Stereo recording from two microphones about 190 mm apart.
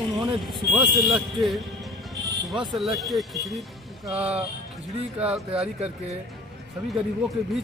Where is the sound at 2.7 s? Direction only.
Centre (ahead or behind).